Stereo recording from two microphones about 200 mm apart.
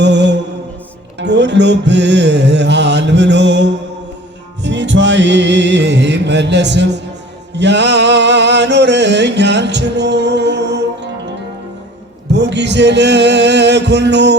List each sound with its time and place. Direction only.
0.0 s mantra: 60° right (ahead or behind)
1.2 s music: 60° right (ahead or behind)
12.3 s music: 60° right (ahead or behind)